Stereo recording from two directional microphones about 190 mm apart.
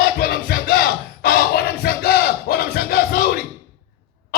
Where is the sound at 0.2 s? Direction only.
55° left (ahead or behind).